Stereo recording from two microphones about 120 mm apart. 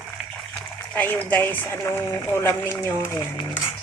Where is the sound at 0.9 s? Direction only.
15° left (ahead or behind).